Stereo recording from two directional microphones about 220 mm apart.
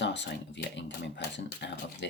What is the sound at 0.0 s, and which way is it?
Speech, 50° left (ahead or behind).